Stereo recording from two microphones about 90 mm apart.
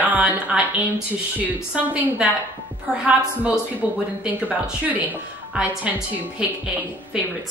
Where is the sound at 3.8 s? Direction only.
15° right (ahead or behind).